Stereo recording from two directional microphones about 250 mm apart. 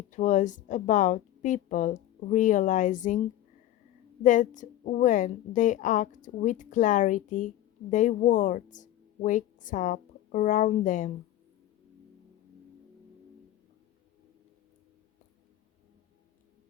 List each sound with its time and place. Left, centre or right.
0.1 s a woman's voice: left
4.2 s a woman's voice: left